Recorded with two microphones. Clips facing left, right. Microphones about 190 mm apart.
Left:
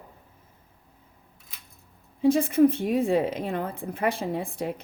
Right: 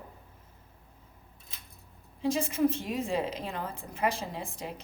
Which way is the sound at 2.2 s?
55° left (ahead or behind).